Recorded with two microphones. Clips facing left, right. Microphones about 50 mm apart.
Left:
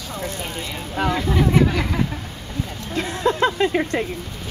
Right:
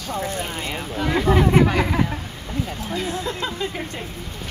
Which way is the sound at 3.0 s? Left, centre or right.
Left.